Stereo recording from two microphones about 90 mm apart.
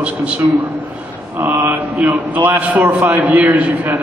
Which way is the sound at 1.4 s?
20° right (ahead or behind).